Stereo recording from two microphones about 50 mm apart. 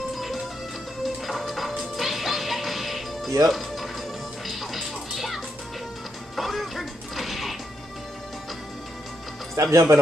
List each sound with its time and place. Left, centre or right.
1.0 s music: centre
9.6 s speech: right